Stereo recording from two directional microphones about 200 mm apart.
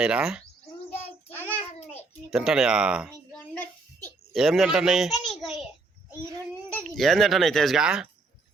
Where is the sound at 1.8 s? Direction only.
30° left (ahead or behind).